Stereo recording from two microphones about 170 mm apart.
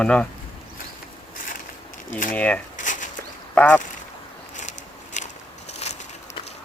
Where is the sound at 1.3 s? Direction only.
55° left (ahead or behind).